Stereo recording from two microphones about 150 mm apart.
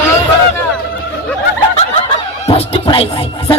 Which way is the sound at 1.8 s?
40° left (ahead or behind).